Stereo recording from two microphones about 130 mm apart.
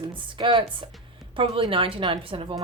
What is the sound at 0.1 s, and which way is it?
A woman's voice, 40° right (ahead or behind).